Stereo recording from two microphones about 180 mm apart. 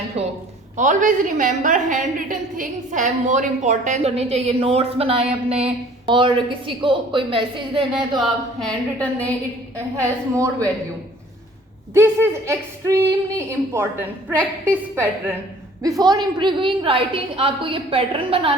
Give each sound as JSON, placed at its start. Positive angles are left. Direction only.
{"t": 0.2, "sound": "a woman's voice", "side_deg": -35}
{"t": 0.8, "sound": "a woman's voice", "side_deg": -45}
{"t": 8.2, "sound": "a woman's voice", "side_deg": 5}
{"t": 9.7, "sound": "speech", "side_deg": -15}
{"t": 11.9, "sound": "a woman's voice", "side_deg": -15}